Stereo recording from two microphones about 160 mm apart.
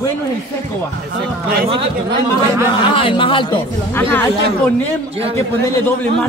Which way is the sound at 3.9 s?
15° left (ahead or behind).